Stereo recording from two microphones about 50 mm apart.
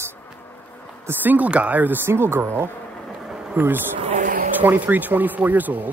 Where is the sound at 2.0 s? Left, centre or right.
Right.